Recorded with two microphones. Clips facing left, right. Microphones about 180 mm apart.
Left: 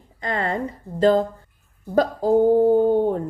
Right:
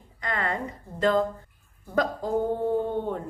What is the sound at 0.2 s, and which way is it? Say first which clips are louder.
A woman's voice: left 5 dB; 30° left (ahead or behind).